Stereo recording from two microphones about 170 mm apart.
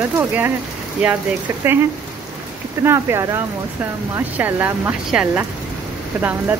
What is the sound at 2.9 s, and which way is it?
Speech, 15° right (ahead or behind).